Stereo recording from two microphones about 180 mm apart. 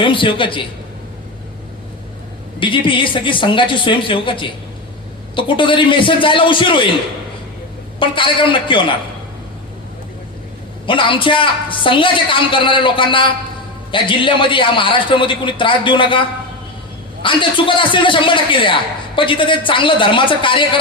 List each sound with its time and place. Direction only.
0.0 s a man's voice: 30° left (ahead or behind)
2.6 s a man's voice: 30° left (ahead or behind)
7.9 s a man's voice: 30° left (ahead or behind)
10.8 s a man's voice: 30° left (ahead or behind)
17.2 s a man's voice: 30° left (ahead or behind)